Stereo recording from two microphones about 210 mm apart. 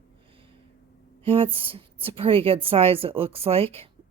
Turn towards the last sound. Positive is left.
turn(degrees=-25)  # may be behind; listen again after turning